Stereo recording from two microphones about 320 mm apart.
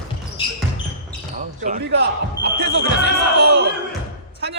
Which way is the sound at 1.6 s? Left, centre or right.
Right.